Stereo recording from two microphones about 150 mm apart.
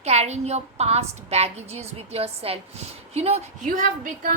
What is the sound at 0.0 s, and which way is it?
A woman's voice, 45° right (ahead or behind).